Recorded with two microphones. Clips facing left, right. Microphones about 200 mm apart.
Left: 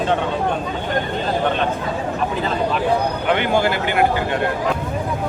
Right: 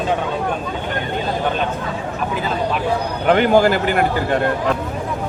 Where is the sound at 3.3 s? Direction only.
45° right (ahead or behind).